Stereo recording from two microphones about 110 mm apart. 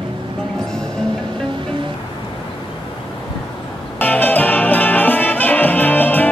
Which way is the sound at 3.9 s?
15° left (ahead or behind).